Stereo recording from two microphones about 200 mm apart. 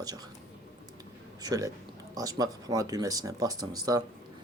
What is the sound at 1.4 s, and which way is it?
Speech, 20° right (ahead or behind).